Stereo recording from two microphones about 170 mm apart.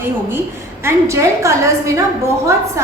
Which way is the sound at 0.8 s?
15° right (ahead or behind).